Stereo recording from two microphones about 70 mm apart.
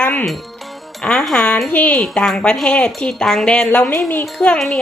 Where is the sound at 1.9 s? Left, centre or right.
Centre.